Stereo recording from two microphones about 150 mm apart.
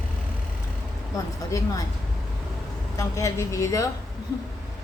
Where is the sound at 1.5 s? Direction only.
20° left (ahead or behind).